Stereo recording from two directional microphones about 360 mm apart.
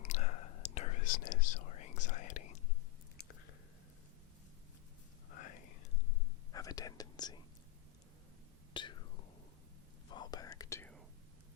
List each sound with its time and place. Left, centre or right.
0.0 s whispering: centre
6.5 s whispering: centre
8.7 s whispering: centre
10.1 s whispering: centre